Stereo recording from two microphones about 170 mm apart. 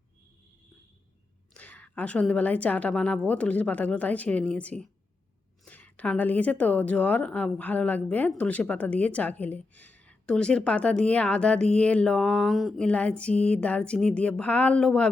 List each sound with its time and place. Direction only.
1.5 s a woman's voice: 10° left (ahead or behind)